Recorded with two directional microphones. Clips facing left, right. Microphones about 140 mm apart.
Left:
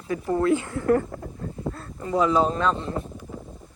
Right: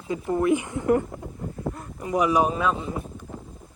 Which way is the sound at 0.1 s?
20° right (ahead or behind).